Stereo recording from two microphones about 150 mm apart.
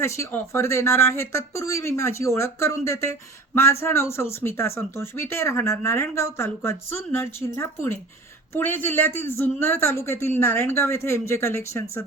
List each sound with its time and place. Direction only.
0.0 s speech: 20° left (ahead or behind)